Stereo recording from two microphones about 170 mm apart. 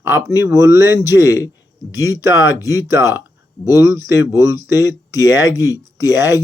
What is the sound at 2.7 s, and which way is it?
Speech, 15° right (ahead or behind).